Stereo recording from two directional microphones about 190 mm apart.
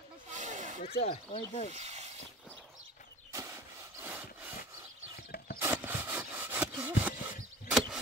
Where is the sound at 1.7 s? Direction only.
35° right (ahead or behind).